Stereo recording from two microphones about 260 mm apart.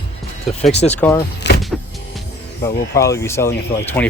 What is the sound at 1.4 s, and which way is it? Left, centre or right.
Power windows, left.